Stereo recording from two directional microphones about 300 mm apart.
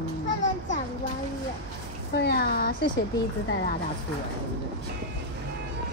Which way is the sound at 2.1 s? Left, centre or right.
Left.